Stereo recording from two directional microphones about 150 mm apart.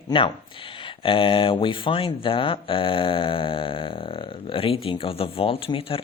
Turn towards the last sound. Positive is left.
turn(degrees=40)  # may be behind; listen again after turning